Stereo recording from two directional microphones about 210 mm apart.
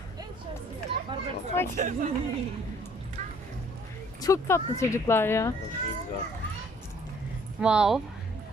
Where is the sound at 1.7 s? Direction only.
40° right (ahead or behind).